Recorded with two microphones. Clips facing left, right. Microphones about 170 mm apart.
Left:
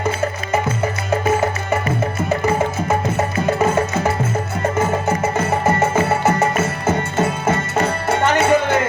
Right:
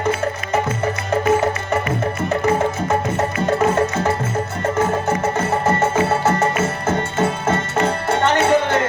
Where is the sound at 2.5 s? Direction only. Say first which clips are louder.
Even; 5° left (ahead or behind).